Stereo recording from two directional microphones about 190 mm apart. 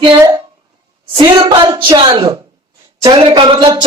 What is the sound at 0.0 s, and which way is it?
A woman's voice, 20° right (ahead or behind).